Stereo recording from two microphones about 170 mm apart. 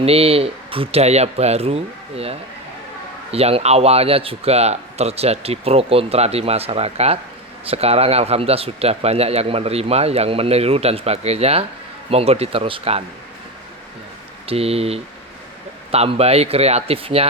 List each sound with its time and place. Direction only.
0.0 s a man's voice: 35° right (ahead or behind)
14.4 s a man's voice: 35° right (ahead or behind)